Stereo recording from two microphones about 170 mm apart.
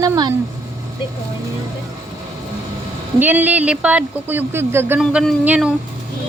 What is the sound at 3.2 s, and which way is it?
Speech, 10° right (ahead or behind).